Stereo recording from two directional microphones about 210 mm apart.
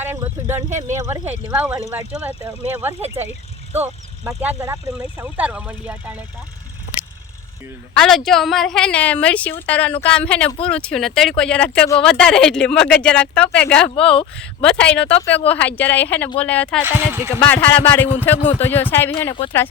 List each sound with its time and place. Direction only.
0.0 s a sound: 10° right (ahead or behind)
0.7 s speech: 35° right (ahead or behind)
0.9 s speech: 10° right (ahead or behind)
7.9 s a woman's voice: centre (ahead or behind)
16.8 s speech: 10° right (ahead or behind)
17.4 s speech: 10° left (ahead or behind)